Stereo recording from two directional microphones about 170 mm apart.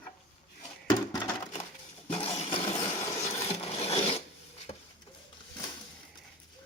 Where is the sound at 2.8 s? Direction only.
20° left (ahead or behind).